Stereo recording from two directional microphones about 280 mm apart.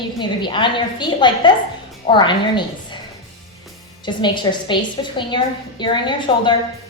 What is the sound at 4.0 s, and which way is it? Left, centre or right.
A woman's voice, centre.